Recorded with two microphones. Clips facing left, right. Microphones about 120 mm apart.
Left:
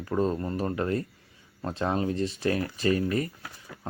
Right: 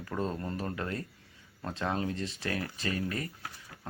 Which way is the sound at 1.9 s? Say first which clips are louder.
Left 5 dB; 15° left (ahead or behind).